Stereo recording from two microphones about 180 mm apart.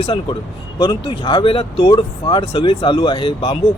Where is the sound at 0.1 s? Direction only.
25° left (ahead or behind).